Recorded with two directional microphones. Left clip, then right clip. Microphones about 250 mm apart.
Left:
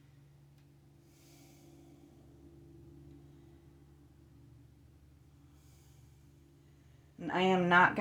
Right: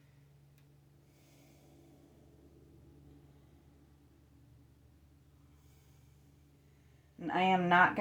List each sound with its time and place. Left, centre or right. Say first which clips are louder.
7.2 s a man's voice: even; left